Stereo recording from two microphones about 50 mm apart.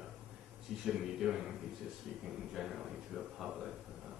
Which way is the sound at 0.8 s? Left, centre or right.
Centre.